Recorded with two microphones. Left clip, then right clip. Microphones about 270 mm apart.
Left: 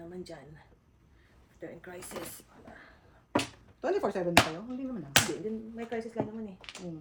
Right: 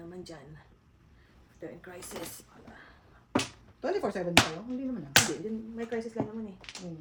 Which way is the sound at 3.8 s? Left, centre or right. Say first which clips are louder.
Left 1 dB; centre.